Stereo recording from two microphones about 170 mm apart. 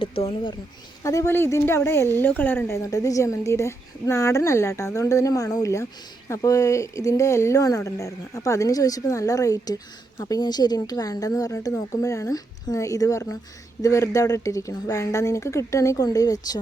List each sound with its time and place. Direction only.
0.0 s speech: 35° left (ahead or behind)
1.0 s a woman's voice: 15° left (ahead or behind)